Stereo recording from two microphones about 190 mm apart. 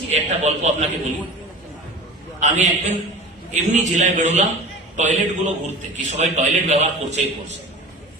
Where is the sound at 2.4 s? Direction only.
40° right (ahead or behind).